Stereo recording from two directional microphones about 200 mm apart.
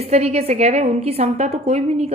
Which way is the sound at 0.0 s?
30° right (ahead or behind).